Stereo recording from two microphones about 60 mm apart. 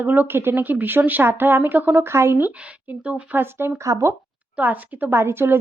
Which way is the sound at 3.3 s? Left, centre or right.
Right.